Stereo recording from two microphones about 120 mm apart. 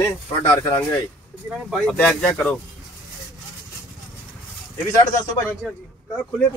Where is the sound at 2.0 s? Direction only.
10° left (ahead or behind).